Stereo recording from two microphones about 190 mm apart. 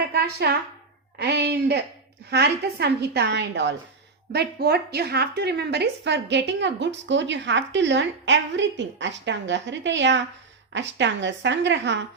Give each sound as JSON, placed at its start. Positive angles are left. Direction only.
{"t": 0.1, "sound": "a sound", "side_deg": -55}
{"t": 1.2, "sound": "a woman's voice", "side_deg": -60}
{"t": 4.3, "sound": "a woman's voice", "side_deg": -55}